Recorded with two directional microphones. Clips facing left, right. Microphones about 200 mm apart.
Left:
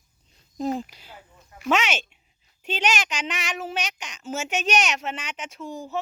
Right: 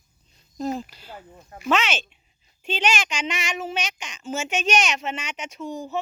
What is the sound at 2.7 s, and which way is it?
A woman's voice, 10° left (ahead or behind).